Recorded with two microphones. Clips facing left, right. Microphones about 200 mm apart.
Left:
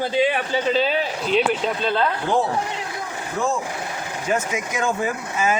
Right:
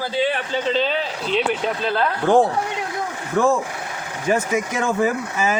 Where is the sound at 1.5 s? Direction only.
5° right (ahead or behind).